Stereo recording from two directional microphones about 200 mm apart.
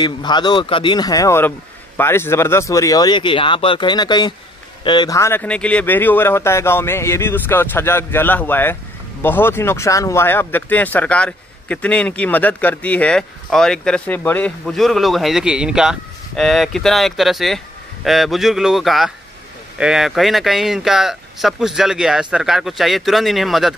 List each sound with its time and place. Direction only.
0.0 s speech: 20° left (ahead or behind); by 23.7 s centre (ahead or behind)